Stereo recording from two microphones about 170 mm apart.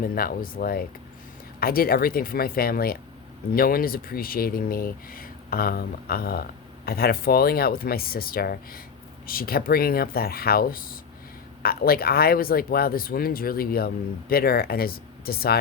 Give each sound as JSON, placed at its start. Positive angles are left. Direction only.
{"t": 0.0, "sound": "speech", "side_deg": 60}